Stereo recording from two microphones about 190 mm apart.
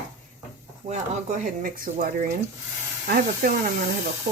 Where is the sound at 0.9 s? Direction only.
35° right (ahead or behind).